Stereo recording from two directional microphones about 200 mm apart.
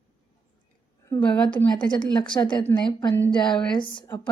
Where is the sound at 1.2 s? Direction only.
5° left (ahead or behind).